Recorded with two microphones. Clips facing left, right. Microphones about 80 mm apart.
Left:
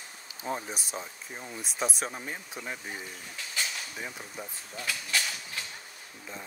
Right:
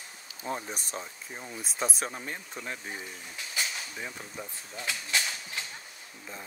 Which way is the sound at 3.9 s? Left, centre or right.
Centre.